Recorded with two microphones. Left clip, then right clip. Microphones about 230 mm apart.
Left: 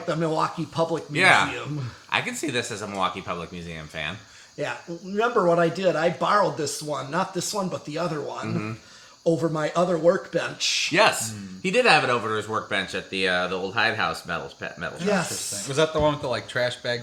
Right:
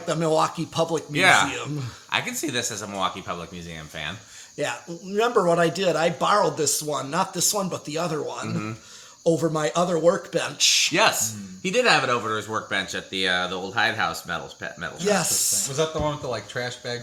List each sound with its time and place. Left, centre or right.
0.1 s speech: right
1.1 s speech: centre
4.6 s speech: right
10.9 s speech: centre
15.0 s speech: right
15.7 s speech: left